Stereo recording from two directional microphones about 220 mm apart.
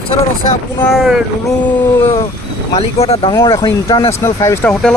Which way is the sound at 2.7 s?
25° left (ahead or behind).